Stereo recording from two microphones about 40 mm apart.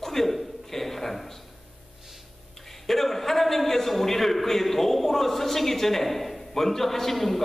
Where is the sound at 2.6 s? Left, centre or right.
Centre.